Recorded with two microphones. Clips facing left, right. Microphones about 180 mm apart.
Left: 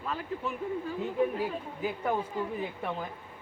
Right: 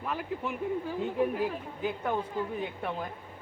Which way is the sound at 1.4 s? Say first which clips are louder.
Right 1 dB; 5° left (ahead or behind).